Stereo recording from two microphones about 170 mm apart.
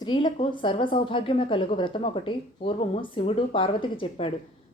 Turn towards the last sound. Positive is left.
turn(degrees=30)  # may be behind; listen again after turning